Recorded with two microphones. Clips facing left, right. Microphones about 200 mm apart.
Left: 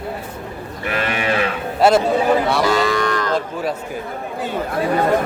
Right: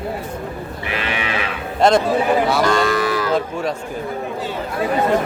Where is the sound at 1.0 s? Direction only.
45° left (ahead or behind).